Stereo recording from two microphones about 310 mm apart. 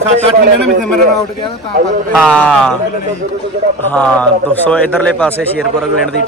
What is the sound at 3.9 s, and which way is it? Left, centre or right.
A man's voice, centre.